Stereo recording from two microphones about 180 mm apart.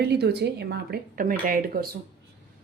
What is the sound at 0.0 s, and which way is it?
Speech, 65° right (ahead or behind).